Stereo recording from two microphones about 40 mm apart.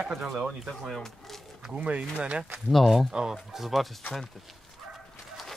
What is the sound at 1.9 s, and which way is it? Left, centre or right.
Speech, right.